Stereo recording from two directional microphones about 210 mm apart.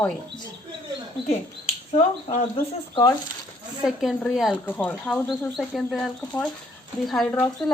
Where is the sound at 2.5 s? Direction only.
15° left (ahead or behind).